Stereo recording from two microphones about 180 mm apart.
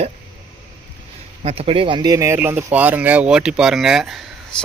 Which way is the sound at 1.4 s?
35° right (ahead or behind).